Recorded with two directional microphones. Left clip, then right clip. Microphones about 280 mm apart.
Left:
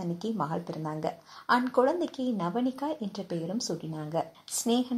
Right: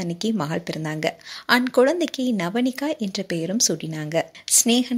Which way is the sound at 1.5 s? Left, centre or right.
Right.